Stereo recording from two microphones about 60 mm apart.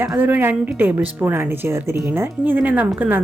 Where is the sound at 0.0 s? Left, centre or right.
Right.